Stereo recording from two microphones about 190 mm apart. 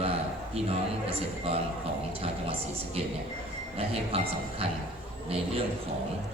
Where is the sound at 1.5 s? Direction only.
30° right (ahead or behind).